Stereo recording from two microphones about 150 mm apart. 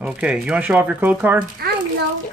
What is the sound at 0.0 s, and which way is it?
Speech, 5° right (ahead or behind).